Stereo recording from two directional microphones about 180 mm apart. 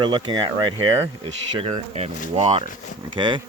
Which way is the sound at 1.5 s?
35° right (ahead or behind).